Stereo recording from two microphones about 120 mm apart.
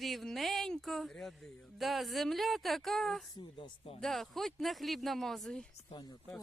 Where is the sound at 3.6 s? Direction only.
55° left (ahead or behind).